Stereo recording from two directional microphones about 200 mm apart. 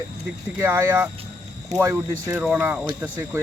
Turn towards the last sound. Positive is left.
turn(degrees=-10)  # may be behind; listen again after turning